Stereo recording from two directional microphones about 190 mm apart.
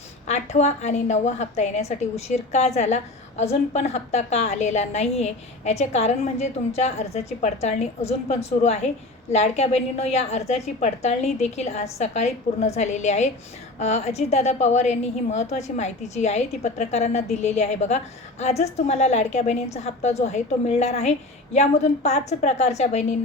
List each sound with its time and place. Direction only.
0.3 s a woman's voice: 35° left (ahead or behind)